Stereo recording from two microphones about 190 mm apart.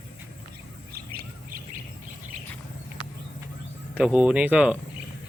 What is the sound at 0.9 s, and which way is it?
Bird, 50° right (ahead or behind).